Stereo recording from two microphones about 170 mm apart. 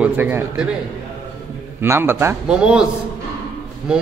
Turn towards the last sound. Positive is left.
turn(degrees=-5)  # may be behind; listen again after turning